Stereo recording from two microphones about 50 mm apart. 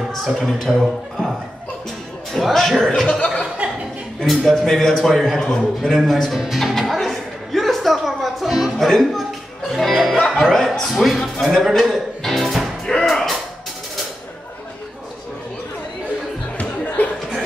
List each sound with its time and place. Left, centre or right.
0.4 s speech: centre
0.7 s a man's voice: centre
2.3 s a man's voice: centre
2.9 s speech: centre
3.6 s music: right
4.4 s a man's voice: centre
5.8 s a man's voice: centre
6.3 s music: centre
9.8 s a man's voice: centre
11.4 s music: centre
16.5 s a sound: left